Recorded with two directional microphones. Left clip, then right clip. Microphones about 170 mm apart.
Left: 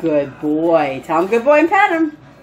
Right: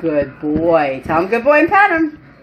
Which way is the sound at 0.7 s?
Centre (ahead or behind).